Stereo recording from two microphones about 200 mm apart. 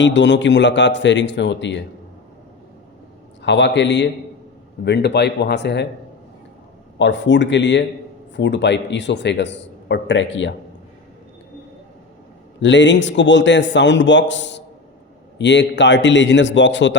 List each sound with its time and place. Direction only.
0.0 s a man's voice: 65° left (ahead or behind)
3.4 s a man's voice: 60° left (ahead or behind)
7.0 s a man's voice: 65° left (ahead or behind)
12.6 s a man's voice: 65° left (ahead or behind)